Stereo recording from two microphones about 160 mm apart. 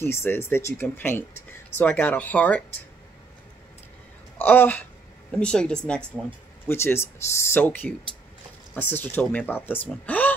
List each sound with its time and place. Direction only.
0.0 s speech: 15° left (ahead or behind)
4.4 s speech: 10° left (ahead or behind)
10.0 s a sound: 10° left (ahead or behind)